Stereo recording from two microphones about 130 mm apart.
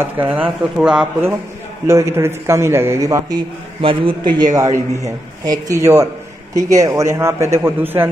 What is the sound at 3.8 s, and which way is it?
Speech, 40° right (ahead or behind).